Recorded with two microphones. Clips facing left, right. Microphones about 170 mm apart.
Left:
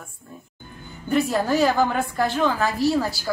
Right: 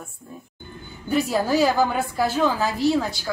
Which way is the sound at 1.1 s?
Centre (ahead or behind).